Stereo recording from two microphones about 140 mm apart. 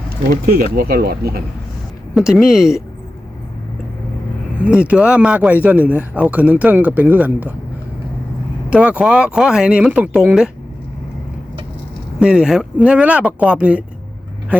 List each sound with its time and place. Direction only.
0.4 s speech: 90° right
2.1 s speech: 5° right (ahead or behind)
4.6 s speech: 10° right (ahead or behind)
8.7 s speech: 10° right (ahead or behind)
12.2 s speech: 5° right (ahead or behind)